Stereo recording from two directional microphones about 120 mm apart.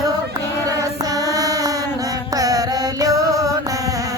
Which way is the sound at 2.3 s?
30° right (ahead or behind).